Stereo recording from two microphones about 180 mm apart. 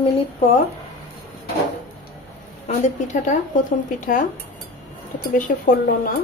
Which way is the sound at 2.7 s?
40° left (ahead or behind).